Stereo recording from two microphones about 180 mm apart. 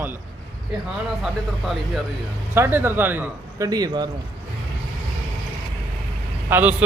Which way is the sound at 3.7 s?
20° right (ahead or behind).